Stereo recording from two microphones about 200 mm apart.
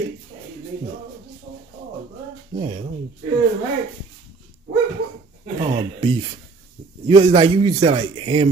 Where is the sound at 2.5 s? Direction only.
30° right (ahead or behind).